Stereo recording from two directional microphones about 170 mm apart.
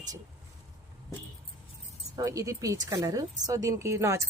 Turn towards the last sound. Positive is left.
turn(degrees=-15)  # may be behind; listen again after turning